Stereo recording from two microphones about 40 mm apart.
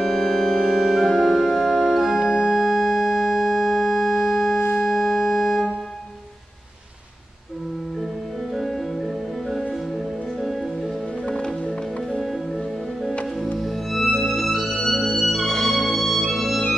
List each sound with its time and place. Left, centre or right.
0.0 s organ: centre
0.7 s organ: centre
2.6 s music: centre
4.8 s organ: centre
8.5 s music: centre
11.2 s music: left
12.2 s music: centre